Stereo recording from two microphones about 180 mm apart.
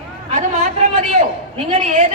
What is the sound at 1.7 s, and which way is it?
Speech, 45° right (ahead or behind).